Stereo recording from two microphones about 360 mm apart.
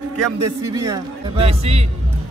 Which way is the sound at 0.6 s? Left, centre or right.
Centre.